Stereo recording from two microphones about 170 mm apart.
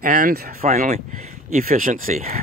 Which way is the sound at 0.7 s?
45° right (ahead or behind).